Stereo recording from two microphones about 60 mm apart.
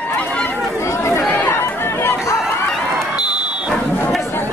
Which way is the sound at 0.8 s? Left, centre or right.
Left.